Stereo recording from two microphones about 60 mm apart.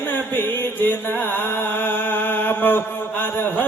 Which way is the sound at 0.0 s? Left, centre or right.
Left.